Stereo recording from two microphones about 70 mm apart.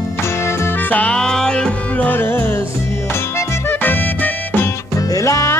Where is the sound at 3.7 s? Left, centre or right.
Left.